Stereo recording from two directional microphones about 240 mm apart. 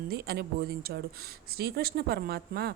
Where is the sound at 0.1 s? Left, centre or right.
Right.